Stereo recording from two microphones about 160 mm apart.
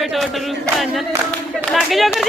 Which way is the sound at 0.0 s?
Centre (ahead or behind).